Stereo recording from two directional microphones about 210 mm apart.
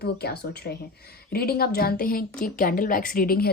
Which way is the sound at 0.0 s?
50° left (ahead or behind).